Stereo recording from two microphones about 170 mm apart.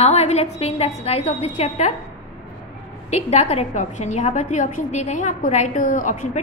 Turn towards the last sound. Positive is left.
turn(degrees=45)  # may be behind; listen again after turning